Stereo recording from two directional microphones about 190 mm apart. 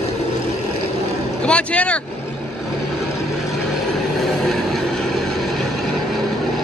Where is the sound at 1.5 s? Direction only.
5° left (ahead or behind).